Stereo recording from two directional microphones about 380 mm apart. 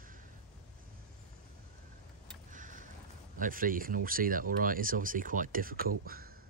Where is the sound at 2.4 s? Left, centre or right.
Centre.